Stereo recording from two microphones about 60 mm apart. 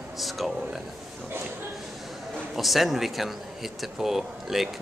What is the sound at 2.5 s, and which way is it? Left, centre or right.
Speech, centre.